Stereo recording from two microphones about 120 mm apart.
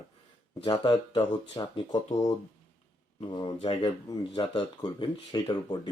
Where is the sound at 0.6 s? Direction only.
40° left (ahead or behind).